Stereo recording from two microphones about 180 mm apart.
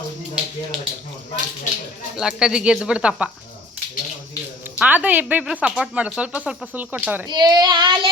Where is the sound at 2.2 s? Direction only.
5° right (ahead or behind).